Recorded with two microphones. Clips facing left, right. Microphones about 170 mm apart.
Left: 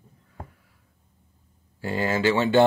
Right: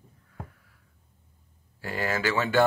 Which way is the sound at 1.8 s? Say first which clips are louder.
Left 5 dB; 25° left (ahead or behind).